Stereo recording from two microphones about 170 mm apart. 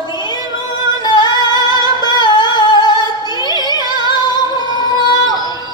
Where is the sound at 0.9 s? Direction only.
25° left (ahead or behind).